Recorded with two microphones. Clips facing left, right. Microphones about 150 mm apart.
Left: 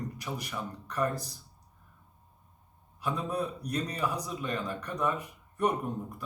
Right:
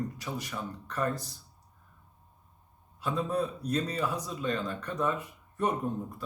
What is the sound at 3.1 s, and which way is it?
Speech, 15° left (ahead or behind).